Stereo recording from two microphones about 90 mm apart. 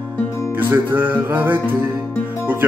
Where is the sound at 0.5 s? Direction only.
20° right (ahead or behind).